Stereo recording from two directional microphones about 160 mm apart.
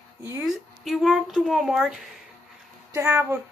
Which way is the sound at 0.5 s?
Centre (ahead or behind).